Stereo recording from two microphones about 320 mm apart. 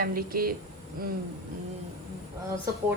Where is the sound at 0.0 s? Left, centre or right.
Right.